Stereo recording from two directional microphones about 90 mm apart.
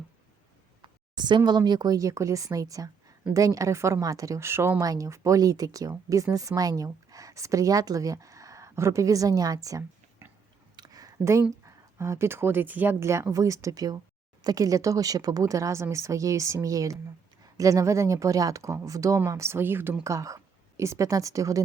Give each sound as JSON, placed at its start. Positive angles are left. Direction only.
{"t": 0.8, "sound": "a sound", "side_deg": -55}
{"t": 1.5, "sound": "speech", "side_deg": -50}
{"t": 4.8, "sound": "a woman's voice", "side_deg": -40}
{"t": 10.8, "sound": "a sound", "side_deg": -45}
{"t": 11.6, "sound": "speech", "side_deg": -35}
{"t": 20.1, "sound": "a woman's voice", "side_deg": -40}